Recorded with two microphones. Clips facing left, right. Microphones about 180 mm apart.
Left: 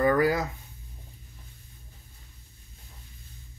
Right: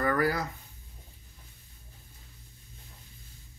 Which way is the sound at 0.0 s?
20° left (ahead or behind).